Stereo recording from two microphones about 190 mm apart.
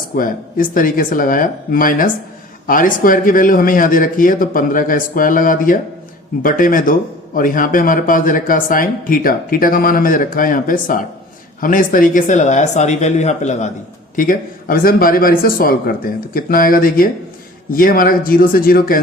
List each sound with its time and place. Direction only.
0.2 s speech: 45° left (ahead or behind)
14.2 s speech: 50° left (ahead or behind)